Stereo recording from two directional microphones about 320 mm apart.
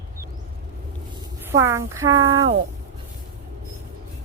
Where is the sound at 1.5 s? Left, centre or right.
Centre.